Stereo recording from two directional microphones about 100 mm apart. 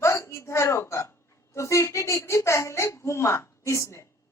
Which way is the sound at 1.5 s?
30° left (ahead or behind).